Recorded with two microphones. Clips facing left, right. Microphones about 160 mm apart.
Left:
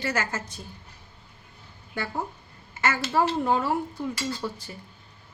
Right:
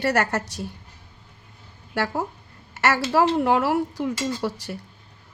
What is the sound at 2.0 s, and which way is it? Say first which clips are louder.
Speech: right 6 dB; 75° right (ahead or behind).